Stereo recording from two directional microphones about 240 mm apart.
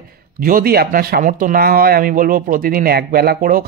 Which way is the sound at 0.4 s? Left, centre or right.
Right.